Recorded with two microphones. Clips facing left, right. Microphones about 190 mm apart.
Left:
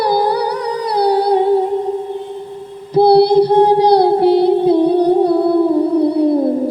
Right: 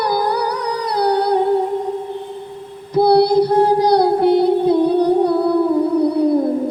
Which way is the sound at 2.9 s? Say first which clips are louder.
Left 3 dB; 30° left (ahead or behind).